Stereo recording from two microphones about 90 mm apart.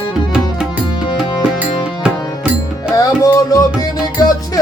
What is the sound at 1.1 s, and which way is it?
Music, 55° left (ahead or behind).